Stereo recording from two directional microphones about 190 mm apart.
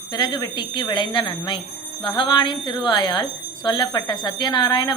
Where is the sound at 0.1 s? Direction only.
20° left (ahead or behind).